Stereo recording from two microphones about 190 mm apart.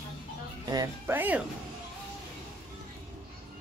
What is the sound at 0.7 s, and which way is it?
Speech, 15° right (ahead or behind).